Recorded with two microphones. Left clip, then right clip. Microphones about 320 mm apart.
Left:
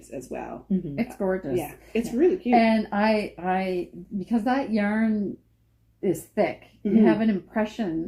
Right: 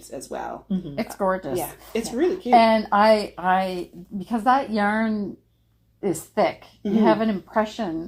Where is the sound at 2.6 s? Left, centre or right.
Right.